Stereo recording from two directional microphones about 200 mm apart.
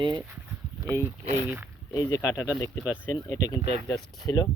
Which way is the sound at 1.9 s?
15° left (ahead or behind).